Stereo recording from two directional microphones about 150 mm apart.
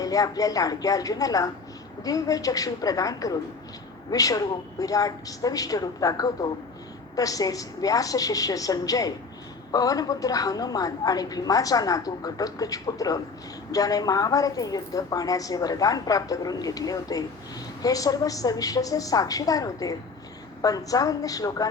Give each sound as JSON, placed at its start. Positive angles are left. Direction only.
{"t": 0.0, "sound": "a woman's voice", "side_deg": 25}